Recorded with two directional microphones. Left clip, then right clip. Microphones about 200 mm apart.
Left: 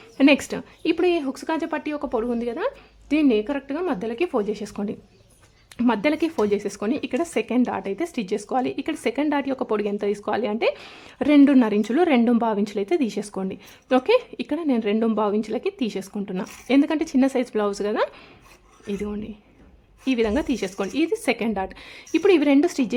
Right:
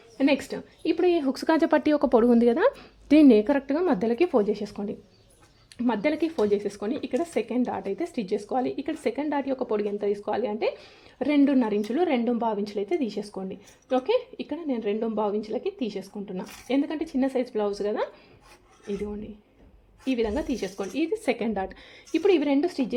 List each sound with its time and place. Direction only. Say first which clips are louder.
0.2 s speech: left 6 dB; 15° left (ahead or behind)
1.1 s a woman's voice: right 1 dB; 10° right (ahead or behind)
4.6 s a woman's voice: left 2 dB; 10° left (ahead or behind)